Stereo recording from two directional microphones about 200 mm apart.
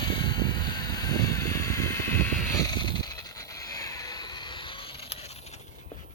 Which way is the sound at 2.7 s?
20° left (ahead or behind).